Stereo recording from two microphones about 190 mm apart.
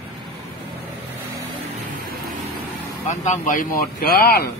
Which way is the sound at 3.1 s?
40° left (ahead or behind).